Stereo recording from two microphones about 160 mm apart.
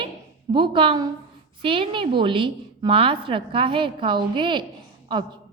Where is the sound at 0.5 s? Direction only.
30° right (ahead or behind).